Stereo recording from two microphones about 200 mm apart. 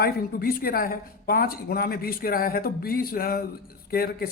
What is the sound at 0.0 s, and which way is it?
Speech, 50° left (ahead or behind).